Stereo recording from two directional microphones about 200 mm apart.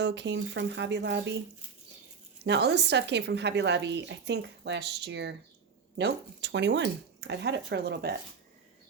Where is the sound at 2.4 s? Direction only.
55° right (ahead or behind).